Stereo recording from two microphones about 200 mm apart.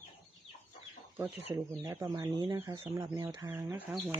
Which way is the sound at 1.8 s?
15° right (ahead or behind).